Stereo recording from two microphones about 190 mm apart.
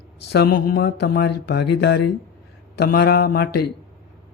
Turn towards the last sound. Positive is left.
turn(degrees=55)  # may be behind; listen again after turning